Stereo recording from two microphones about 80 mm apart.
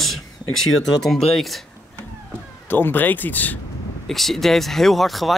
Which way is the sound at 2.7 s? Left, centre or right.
Left.